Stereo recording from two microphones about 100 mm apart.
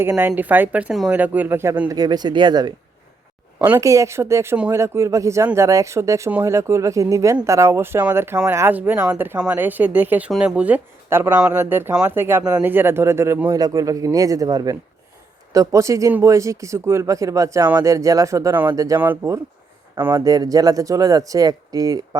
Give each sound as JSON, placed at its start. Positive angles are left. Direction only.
{"t": 0.0, "sound": "speech", "side_deg": -20}
{"t": 1.9, "sound": "speech", "side_deg": -40}
{"t": 3.6, "sound": "speech", "side_deg": -25}
{"t": 11.1, "sound": "speech", "side_deg": -25}
{"t": 11.3, "sound": "speech", "side_deg": -10}
{"t": 12.4, "sound": "speech", "side_deg": -10}
{"t": 18.9, "sound": "speech", "side_deg": -20}
{"t": 20.1, "sound": "speech", "side_deg": -40}